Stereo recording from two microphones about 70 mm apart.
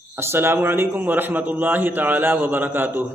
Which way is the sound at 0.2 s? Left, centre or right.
Right.